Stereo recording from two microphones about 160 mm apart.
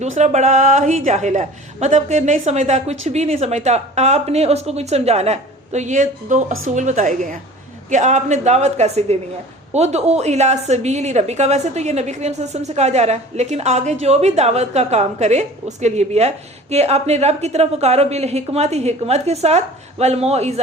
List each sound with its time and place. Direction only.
0.0 s a woman's voice: 45° right (ahead or behind)